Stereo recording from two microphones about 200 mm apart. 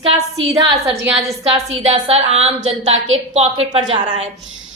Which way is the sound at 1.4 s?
30° right (ahead or behind).